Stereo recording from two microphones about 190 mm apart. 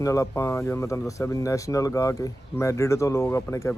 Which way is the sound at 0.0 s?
15° left (ahead or behind).